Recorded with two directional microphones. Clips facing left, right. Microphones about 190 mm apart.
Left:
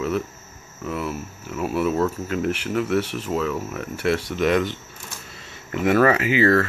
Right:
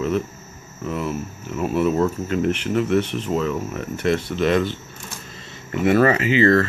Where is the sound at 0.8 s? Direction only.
5° left (ahead or behind).